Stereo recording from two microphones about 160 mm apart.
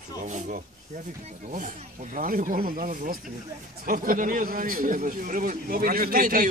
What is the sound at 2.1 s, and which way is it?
A man's voice, 55° right (ahead or behind).